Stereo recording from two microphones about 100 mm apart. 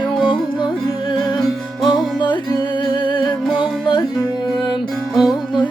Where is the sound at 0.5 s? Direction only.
55° left (ahead or behind).